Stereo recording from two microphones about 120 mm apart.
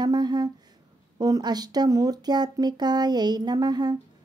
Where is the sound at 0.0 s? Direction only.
35° right (ahead or behind).